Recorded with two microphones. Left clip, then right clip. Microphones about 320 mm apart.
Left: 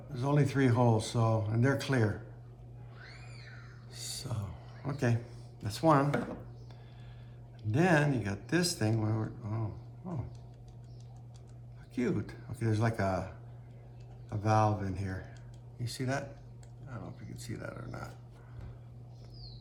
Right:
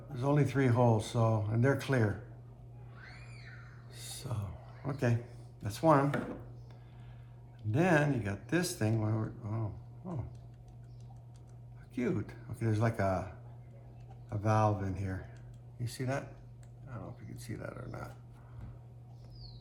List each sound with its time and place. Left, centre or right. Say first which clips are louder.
0.1 s speech: even; centre
3.9 s a sound: left 3 dB; centre
5.6 s speech: even; centre
7.7 s speech: left 1 dB; centre
10.0 s dog: left 1 dB; centre
11.9 s speech: left 1 dB; centre